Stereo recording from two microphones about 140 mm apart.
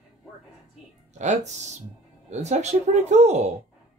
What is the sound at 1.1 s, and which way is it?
A man's voice, 55° right (ahead or behind).